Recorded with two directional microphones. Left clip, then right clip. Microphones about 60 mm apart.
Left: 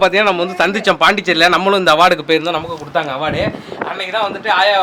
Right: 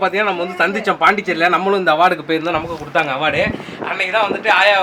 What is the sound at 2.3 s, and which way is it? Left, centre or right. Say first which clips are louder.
Speech: left 3 dB; left.